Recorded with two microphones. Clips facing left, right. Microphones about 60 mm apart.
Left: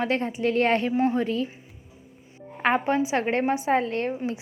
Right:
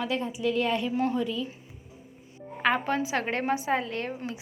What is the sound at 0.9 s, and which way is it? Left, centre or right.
Speech, left.